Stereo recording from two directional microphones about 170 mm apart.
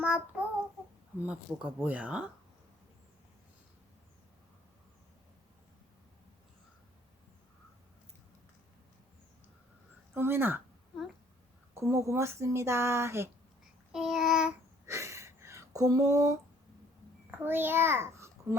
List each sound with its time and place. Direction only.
0.0 s speech: 5° right (ahead or behind)
10.2 s speech: 15° right (ahead or behind)
11.7 s a woman's voice: 15° right (ahead or behind)
13.9 s child singing: 5° right (ahead or behind)
14.8 s a sound: 15° right (ahead or behind)
17.3 s a child's voice: 10° right (ahead or behind)